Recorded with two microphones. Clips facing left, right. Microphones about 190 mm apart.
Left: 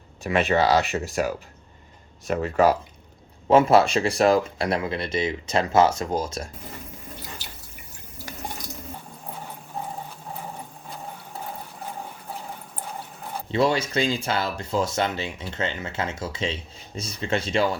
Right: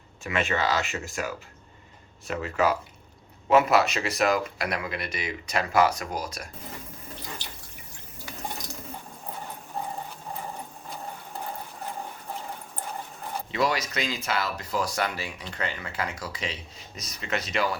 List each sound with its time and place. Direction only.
0.2 s speech: 35° left (ahead or behind)
2.3 s speech: 50° left (ahead or behind)
3.5 s speech: 30° left (ahead or behind)
9.3 s sewing machine: centre (ahead or behind)
13.5 s speech: 30° left (ahead or behind)